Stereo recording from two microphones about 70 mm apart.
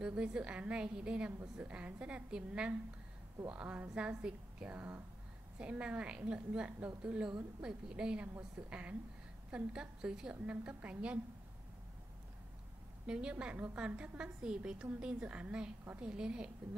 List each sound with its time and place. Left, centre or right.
0.0 s a woman's voice: centre
13.0 s a woman's voice: centre